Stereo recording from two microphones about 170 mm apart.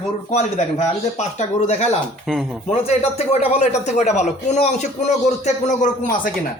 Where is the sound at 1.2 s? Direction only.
40° left (ahead or behind).